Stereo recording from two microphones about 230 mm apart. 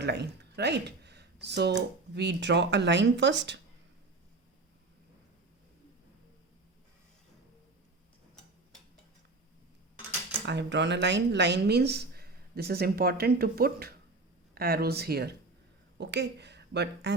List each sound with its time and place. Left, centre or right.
0.0 s speech: right
10.4 s a woman's voice: right